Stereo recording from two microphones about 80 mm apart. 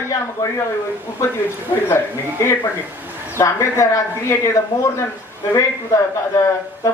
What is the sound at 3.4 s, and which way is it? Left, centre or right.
A man's voice, left.